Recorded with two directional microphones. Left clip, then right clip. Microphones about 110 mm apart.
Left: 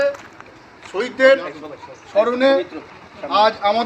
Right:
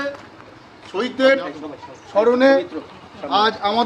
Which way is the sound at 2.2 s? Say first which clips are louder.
Right 3 dB; 15° right (ahead or behind).